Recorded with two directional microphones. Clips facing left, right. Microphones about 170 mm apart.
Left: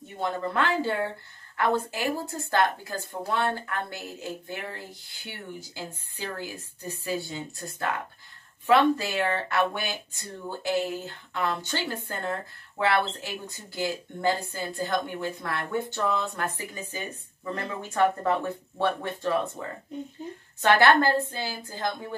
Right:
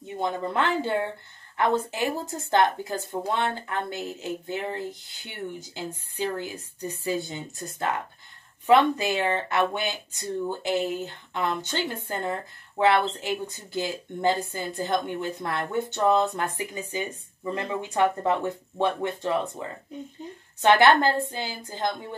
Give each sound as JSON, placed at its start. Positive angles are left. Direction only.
{"t": 0.2, "sound": "a woman's voice", "side_deg": -20}
{"t": 20.6, "sound": "a woman's voice", "side_deg": -20}